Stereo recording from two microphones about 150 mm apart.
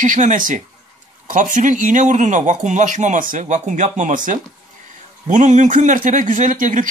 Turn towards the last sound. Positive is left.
turn(degrees=-60)  # may be behind; listen again after turning